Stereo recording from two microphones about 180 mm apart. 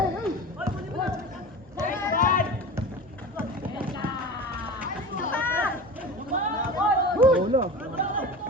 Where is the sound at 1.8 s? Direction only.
45° left (ahead or behind).